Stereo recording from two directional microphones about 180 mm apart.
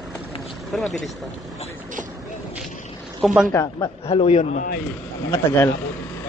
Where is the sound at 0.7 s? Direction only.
5° left (ahead or behind).